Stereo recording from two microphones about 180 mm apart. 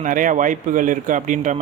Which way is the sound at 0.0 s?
45° right (ahead or behind).